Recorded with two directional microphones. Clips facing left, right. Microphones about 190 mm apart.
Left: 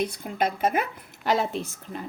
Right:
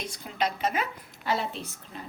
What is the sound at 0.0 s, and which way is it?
A woman's voice, 55° left (ahead or behind).